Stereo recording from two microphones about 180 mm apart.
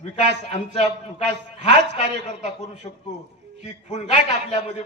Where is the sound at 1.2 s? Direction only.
70° right (ahead or behind).